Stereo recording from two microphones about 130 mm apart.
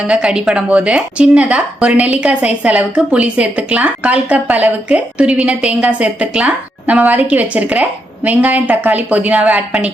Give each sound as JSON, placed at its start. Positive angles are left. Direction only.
{"t": 0.1, "sound": "speech", "side_deg": -5}